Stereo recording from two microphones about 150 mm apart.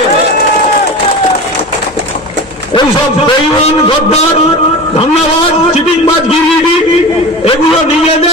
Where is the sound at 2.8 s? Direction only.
40° left (ahead or behind).